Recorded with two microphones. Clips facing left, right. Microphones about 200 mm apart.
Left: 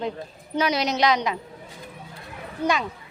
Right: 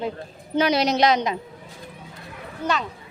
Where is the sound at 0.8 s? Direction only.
30° right (ahead or behind).